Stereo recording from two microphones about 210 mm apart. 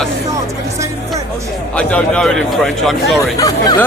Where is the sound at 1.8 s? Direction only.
5° left (ahead or behind).